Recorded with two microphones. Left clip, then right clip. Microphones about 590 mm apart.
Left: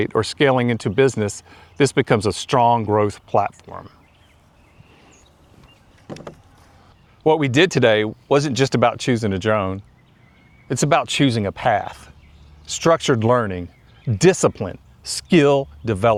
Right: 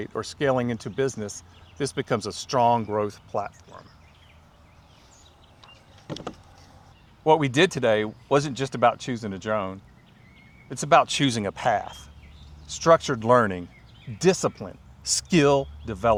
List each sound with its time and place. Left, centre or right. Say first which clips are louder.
0.0 s speech: left 9 dB; left
7.3 s speech: left 4 dB; left
14.2 s speech: left 7 dB; left
15.2 s speech: left 5 dB; left